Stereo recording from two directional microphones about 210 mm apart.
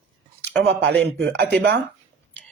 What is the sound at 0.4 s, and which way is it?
Speech, 55° right (ahead or behind).